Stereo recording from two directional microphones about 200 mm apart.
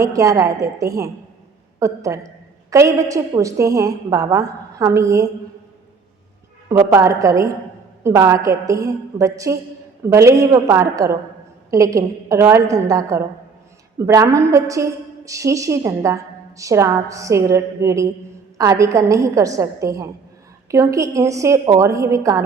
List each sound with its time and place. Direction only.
0.0 s a woman's voice: 15° right (ahead or behind)
6.7 s a woman's voice: 15° right (ahead or behind)